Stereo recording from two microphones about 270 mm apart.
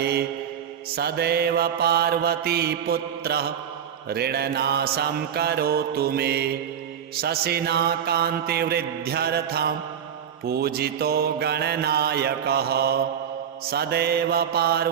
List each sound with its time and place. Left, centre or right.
0.0 s mantra: right